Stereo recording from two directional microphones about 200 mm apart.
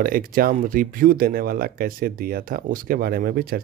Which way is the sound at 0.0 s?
45° right (ahead or behind).